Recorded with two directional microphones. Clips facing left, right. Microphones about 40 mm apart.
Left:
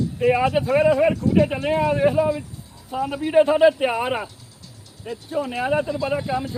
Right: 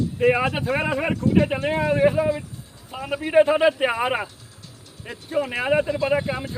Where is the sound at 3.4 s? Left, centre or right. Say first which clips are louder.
Left 3 dB; right.